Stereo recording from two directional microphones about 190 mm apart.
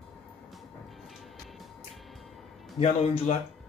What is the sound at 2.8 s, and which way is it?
Speech, 35° left (ahead or behind).